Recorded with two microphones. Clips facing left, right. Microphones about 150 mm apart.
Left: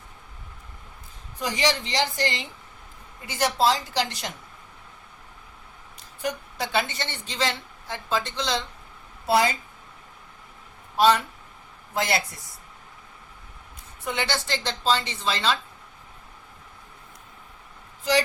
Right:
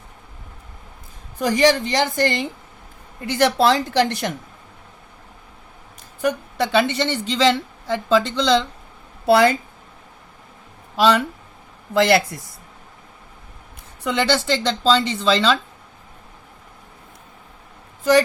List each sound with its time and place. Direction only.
1.4 s a woman's voice: 50° right (ahead or behind)
3.2 s a woman's voice: 65° right (ahead or behind)
6.2 s a woman's voice: 75° right (ahead or behind); by 8.6 s 90° right
9.2 s a woman's voice: 65° right (ahead or behind)
10.9 s speech: 90° right
11.9 s speech: 70° right (ahead or behind)
14.0 s a woman's voice: 90° right